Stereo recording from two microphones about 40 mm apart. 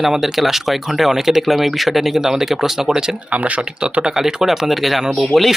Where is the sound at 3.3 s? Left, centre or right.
Right.